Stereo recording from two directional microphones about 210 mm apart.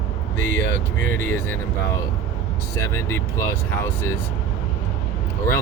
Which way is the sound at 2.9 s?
10° left (ahead or behind).